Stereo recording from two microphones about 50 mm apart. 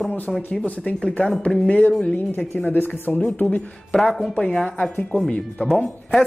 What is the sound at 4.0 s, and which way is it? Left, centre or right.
Speech, centre.